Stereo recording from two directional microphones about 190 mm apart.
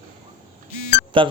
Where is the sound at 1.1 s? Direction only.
25° right (ahead or behind).